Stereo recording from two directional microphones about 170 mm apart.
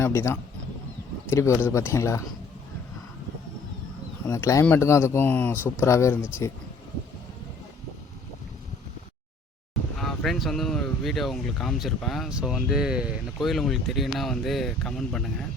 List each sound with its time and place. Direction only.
0.0 s speech: 15° left (ahead or behind)
4.3 s speech: 20° left (ahead or behind)
10.0 s speech: centre (ahead or behind)